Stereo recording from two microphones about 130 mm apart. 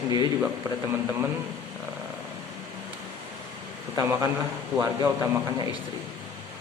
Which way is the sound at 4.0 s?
30° right (ahead or behind).